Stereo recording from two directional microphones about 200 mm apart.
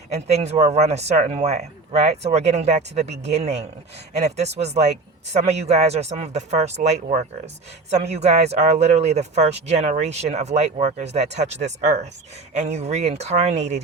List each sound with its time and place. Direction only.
0.1 s speech: 35° right (ahead or behind)